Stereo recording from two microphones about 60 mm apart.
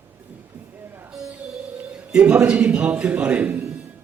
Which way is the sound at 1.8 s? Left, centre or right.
Centre.